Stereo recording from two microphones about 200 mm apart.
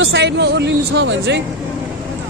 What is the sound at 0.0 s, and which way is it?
Speech, 60° right (ahead or behind).